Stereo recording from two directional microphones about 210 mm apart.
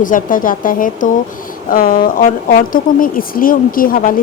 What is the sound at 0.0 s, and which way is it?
Speech, 40° left (ahead or behind).